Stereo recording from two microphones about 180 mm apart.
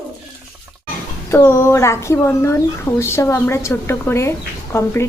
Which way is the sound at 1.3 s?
15° left (ahead or behind).